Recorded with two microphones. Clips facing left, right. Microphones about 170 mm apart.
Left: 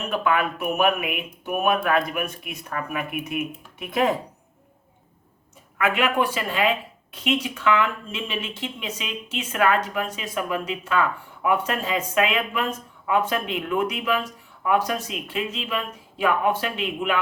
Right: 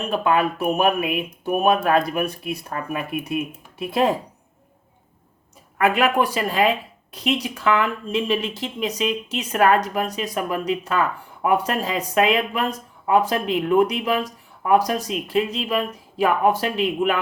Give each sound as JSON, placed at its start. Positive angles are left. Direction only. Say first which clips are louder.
{"t": 0.1, "sound": "speech", "louder": "right 3 dB", "side_deg": -30}
{"t": 5.7, "sound": "speech", "louder": "right 4 dB", "side_deg": -40}